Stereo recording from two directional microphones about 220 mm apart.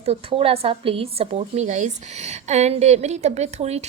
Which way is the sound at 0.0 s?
25° right (ahead or behind).